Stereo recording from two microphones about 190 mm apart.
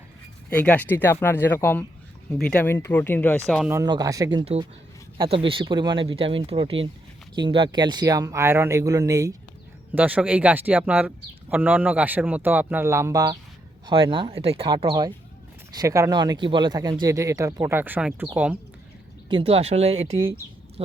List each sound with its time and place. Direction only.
0.5 s speech: 10° left (ahead or behind)
3.7 s speech: 20° right (ahead or behind)
13.8 s speech: 25° right (ahead or behind); by 18.3 s 10° right (ahead or behind)
19.3 s speech: 30° right (ahead or behind)
20.1 s speech: 15° right (ahead or behind)